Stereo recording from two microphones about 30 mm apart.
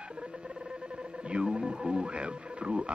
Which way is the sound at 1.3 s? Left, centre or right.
Right.